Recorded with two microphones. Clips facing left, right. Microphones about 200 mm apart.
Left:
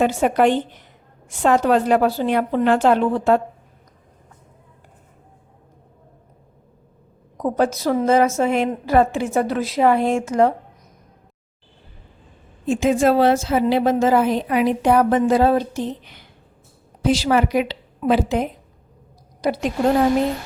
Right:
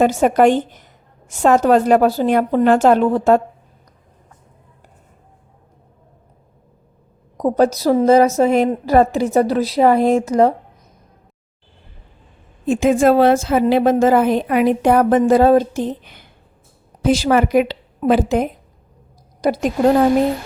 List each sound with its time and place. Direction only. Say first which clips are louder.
0.0 s a woman's voice: right 4 dB; 45° right (ahead or behind)
7.3 s a woman's voice: right 5 dB; 40° right (ahead or behind)
12.6 s a woman's voice: right 3 dB; 55° right (ahead or behind)